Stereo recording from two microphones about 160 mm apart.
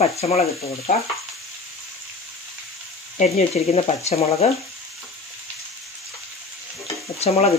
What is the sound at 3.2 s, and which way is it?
Speech, 45° left (ahead or behind).